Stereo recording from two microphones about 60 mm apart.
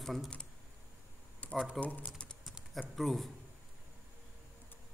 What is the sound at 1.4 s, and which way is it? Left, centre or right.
Typing, left.